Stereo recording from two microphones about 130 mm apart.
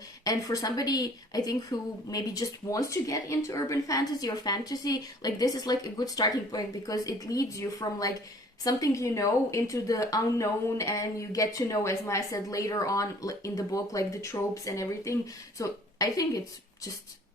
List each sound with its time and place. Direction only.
0.3 s a woman's voice: 30° left (ahead or behind)